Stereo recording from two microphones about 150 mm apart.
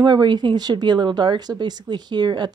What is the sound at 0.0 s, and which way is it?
Speech, 30° right (ahead or behind).